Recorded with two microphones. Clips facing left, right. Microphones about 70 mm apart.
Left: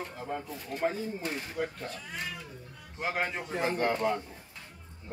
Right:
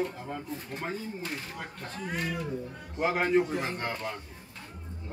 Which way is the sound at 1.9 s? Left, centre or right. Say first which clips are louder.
Right 4 dB; right.